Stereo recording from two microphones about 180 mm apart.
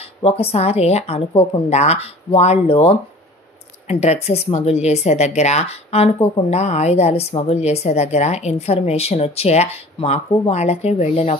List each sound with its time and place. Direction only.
0.2 s speech: 35° left (ahead or behind)